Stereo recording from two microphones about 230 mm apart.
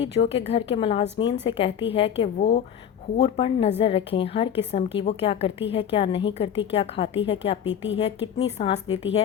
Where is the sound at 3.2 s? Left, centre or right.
Left.